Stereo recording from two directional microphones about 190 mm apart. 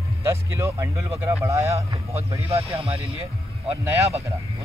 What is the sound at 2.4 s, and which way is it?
Speech, 30° right (ahead or behind).